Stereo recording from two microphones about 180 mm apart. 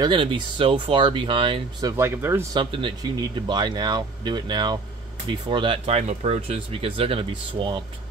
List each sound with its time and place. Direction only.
0.0 s speech: 25° right (ahead or behind)
2.6 s speech: 30° right (ahead or behind)